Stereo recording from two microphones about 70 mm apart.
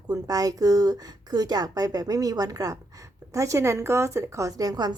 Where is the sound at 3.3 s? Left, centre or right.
Right.